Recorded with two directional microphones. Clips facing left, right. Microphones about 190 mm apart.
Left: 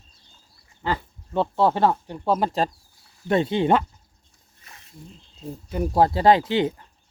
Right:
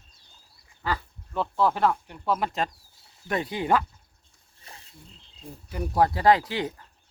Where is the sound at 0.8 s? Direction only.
25° left (ahead or behind).